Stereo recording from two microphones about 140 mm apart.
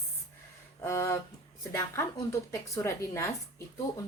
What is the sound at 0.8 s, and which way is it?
Speech, 20° left (ahead or behind).